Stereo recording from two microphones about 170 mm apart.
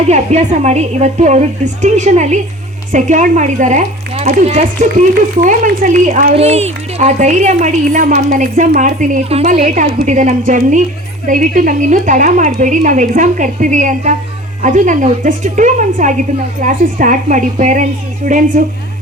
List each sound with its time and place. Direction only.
0.1 s a woman's voice: 40° right (ahead or behind)
6.3 s a woman's voice: 40° right (ahead or behind)